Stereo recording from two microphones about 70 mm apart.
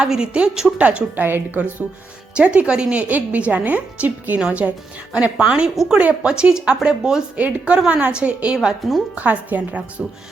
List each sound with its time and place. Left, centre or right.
0.0 s a woman's voice: centre
0.8 s a woman's voice: centre
2.3 s a woman's voice: centre
8.5 s speech: centre
9.1 s a woman's voice: right